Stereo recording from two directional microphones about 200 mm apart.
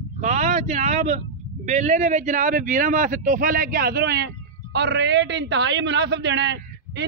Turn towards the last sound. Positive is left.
turn(degrees=-60)  # may be behind; listen again after turning